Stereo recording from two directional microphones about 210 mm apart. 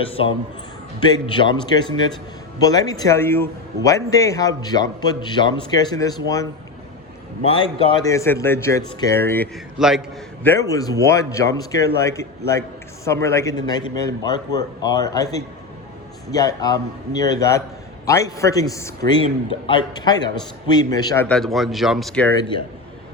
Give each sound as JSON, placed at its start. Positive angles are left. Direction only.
{"t": 0.9, "sound": "a man's voice", "side_deg": 20}
{"t": 9.7, "sound": "speech", "side_deg": 0}
{"t": 10.4, "sound": "a man's voice", "side_deg": 15}
{"t": 16.3, "sound": "a man's voice", "side_deg": 15}
{"t": 21.2, "sound": "speech", "side_deg": 0}